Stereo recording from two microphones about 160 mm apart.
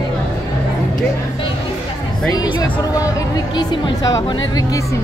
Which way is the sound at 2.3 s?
30° left (ahead or behind).